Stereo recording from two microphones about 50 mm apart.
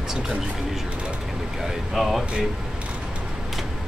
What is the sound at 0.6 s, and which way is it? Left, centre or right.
Speech, centre.